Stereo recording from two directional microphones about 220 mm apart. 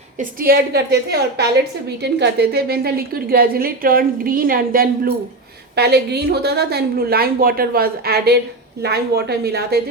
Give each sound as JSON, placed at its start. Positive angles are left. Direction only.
{"t": 0.2, "sound": "a woman's voice", "side_deg": -40}